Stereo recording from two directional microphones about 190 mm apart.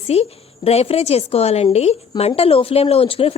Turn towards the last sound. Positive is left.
turn(degrees=30)  # may be behind; listen again after turning